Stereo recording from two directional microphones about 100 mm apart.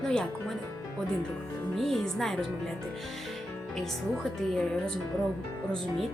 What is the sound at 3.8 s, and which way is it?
Speech, 5° left (ahead or behind).